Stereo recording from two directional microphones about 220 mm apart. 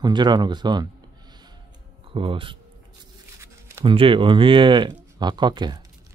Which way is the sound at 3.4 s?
15° right (ahead or behind).